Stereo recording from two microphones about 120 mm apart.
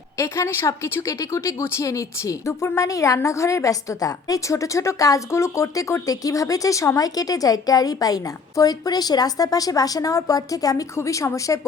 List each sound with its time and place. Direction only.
0.2 s a woman's voice: 25° left (ahead or behind)